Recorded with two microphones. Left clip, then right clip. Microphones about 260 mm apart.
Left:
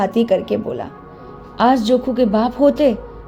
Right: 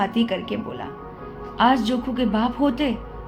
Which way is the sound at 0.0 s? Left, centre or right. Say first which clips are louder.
Left 7 dB; left.